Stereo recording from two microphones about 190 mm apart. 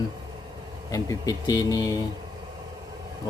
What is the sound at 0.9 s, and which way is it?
Speech, 20° left (ahead or behind).